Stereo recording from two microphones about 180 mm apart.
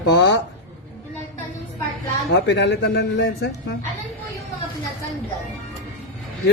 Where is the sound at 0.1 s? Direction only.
75° left (ahead or behind).